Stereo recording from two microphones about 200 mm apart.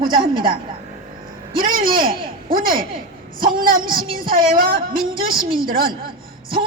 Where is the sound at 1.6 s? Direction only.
45° right (ahead or behind).